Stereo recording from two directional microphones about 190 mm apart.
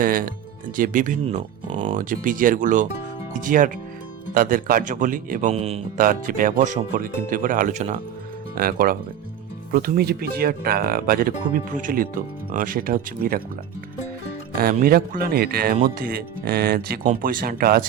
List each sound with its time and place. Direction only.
0.0 s speech: 45° right (ahead or behind)
6.0 s speech: 45° right (ahead or behind)
8.5 s speech: 50° right (ahead or behind)
14.5 s speech: 50° right (ahead or behind)